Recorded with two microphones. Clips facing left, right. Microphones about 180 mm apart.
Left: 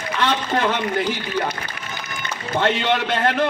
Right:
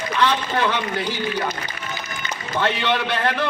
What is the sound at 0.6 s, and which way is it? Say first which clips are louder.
Speech: left 1 dB; 50° left (ahead or behind).